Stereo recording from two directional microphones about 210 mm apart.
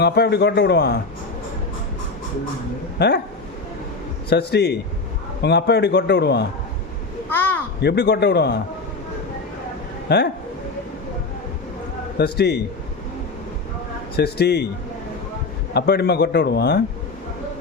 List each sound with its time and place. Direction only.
0.0 s a man's voice: 50° left (ahead or behind)
3.0 s a man's voice: 55° left (ahead or behind)
4.3 s a man's voice: 50° left (ahead or behind)
7.3 s a sound: 10° left (ahead or behind)
7.8 s a man's voice: 55° left (ahead or behind)
10.1 s a man's voice: 55° left (ahead or behind)
12.1 s a man's voice: 50° left (ahead or behind)
14.2 s a man's voice: 50° left (ahead or behind)
15.7 s a man's voice: 50° left (ahead or behind)